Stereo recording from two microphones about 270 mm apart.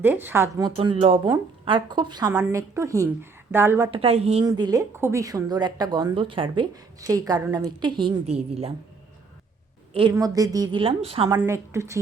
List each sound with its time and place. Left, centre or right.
0.0 s a woman's voice: centre
3.9 s a woman's voice: right
9.9 s a woman's voice: centre
11.3 s a woman's voice: centre